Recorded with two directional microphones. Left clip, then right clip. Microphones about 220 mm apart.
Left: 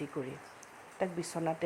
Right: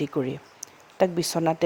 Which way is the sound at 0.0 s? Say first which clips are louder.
Right 12 dB; 50° right (ahead or behind).